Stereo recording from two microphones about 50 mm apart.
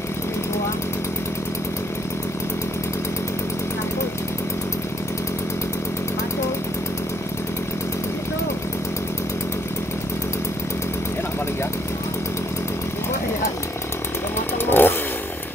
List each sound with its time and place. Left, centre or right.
14.7 s chainsaw: left